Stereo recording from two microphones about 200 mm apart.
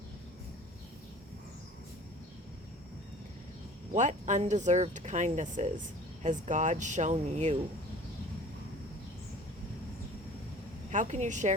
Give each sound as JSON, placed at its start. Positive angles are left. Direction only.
{"t": 3.9, "sound": "speech", "side_deg": -35}
{"t": 10.9, "sound": "speech", "side_deg": -35}